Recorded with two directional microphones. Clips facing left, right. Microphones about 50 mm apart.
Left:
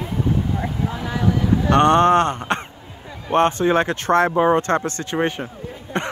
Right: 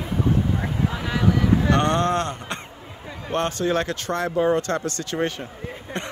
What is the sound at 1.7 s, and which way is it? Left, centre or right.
Speech, left.